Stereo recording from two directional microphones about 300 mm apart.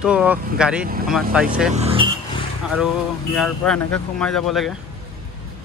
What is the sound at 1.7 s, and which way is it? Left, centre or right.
Vehicle, centre.